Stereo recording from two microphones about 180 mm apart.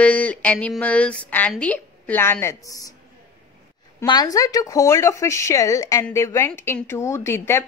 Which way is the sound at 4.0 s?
20° left (ahead or behind).